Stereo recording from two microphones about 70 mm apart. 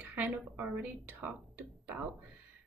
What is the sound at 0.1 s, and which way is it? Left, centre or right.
A woman's voice, right.